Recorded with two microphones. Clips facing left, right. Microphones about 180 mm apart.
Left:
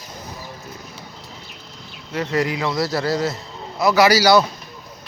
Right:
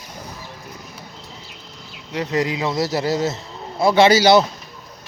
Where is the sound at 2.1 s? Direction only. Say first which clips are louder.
Even; 20° right (ahead or behind).